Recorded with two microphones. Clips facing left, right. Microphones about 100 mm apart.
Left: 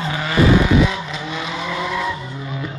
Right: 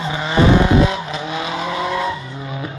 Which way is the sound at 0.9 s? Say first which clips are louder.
Right 3 dB; 45° right (ahead or behind).